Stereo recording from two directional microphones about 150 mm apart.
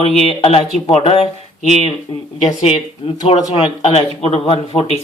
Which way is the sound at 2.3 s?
45° left (ahead or behind).